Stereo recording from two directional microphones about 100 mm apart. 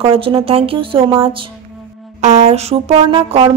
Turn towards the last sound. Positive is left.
turn(degrees=-65)  # may be behind; listen again after turning